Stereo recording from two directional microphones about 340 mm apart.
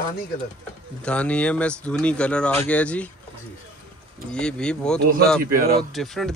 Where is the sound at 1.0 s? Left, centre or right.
Centre.